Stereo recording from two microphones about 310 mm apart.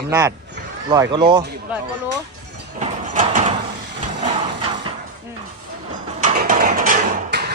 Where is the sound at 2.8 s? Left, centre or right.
Right.